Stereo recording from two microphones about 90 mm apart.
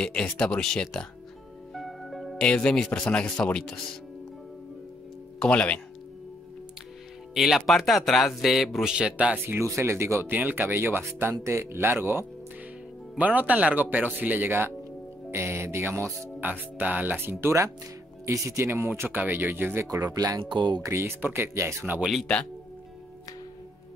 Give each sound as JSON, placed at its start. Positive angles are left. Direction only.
{"t": 0.0, "sound": "speech", "side_deg": 10}
{"t": 5.4, "sound": "speech", "side_deg": 15}
{"t": 7.3, "sound": "a man's voice", "side_deg": -5}
{"t": 9.5, "sound": "speech", "side_deg": -30}
{"t": 18.7, "sound": "speech", "side_deg": -25}
{"t": 20.4, "sound": "speech", "side_deg": -55}
{"t": 20.8, "sound": "speech", "side_deg": -30}